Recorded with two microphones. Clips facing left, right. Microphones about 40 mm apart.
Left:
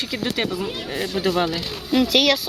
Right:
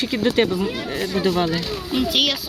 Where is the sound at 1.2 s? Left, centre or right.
Centre.